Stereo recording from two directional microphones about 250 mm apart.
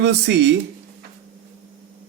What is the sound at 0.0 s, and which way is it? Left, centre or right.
Speech, right.